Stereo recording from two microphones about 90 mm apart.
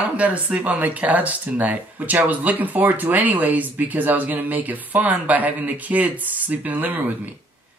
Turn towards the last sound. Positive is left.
turn(degrees=-20)  # may be behind; listen again after turning